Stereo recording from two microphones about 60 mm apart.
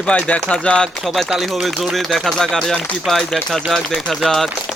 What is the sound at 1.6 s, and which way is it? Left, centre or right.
Speech, centre.